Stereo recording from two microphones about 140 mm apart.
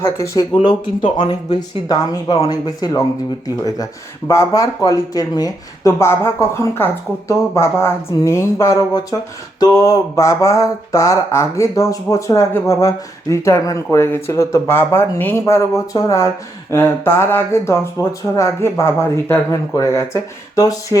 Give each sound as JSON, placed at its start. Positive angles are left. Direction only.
{"t": 0.0, "sound": "speech", "side_deg": 20}
{"t": 0.6, "sound": "speech", "side_deg": 35}